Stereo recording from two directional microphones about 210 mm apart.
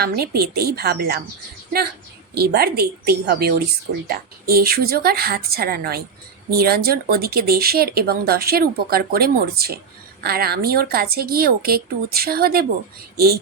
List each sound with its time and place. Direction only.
0.0 s speech: 45° right (ahead or behind)
2.3 s speech: 50° right (ahead or behind)